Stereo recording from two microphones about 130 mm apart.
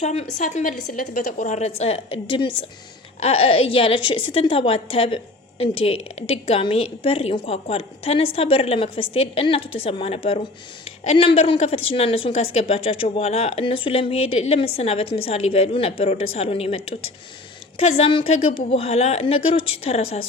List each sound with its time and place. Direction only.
0.0 s a woman's voice: 60° left (ahead or behind)